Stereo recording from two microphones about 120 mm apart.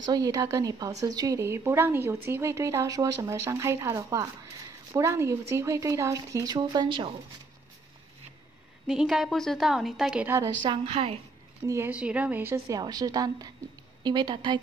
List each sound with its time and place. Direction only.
0.0 s speech: 35° right (ahead or behind)
8.8 s a woman's voice: 5° right (ahead or behind)
10.2 s speech: 25° right (ahead or behind)
10.6 s a woman's voice: 45° right (ahead or behind)
11.6 s speech: 25° right (ahead or behind)
11.9 s speech: 10° right (ahead or behind); by 14.6 s 40° right (ahead or behind)